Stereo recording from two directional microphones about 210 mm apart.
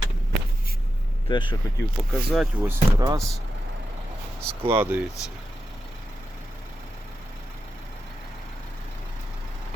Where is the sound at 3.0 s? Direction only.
15° right (ahead or behind).